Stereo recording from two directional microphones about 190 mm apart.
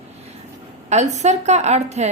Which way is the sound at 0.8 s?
35° right (ahead or behind).